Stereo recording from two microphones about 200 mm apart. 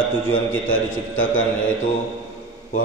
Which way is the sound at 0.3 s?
90° left.